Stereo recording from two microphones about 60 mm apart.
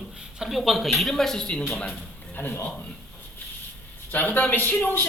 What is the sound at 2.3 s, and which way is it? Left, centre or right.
Speech, left.